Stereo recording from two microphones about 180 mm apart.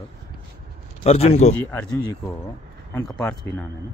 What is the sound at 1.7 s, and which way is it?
Speech, 20° left (ahead or behind).